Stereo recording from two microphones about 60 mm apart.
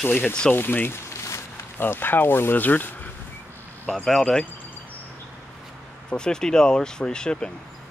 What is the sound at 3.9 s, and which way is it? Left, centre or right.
Speech, centre.